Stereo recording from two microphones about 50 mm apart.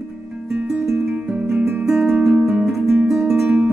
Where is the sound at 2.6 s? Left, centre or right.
Centre.